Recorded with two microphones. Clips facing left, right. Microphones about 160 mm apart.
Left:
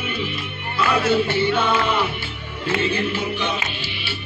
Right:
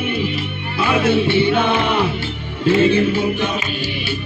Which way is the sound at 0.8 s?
70° right (ahead or behind).